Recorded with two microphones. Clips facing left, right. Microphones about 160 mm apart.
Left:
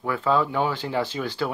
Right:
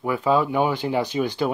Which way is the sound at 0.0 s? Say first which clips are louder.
Right 2 dB; 15° right (ahead or behind).